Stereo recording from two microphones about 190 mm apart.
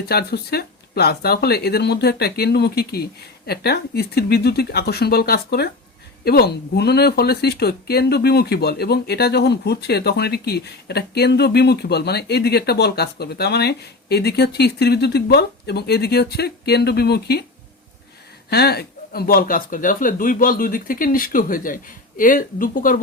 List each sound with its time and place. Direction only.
0.0 s speech: 55° left (ahead or behind)
18.5 s speech: 55° left (ahead or behind)